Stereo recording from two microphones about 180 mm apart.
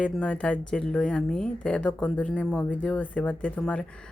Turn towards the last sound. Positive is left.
turn(degrees=5)  # may be behind; listen again after turning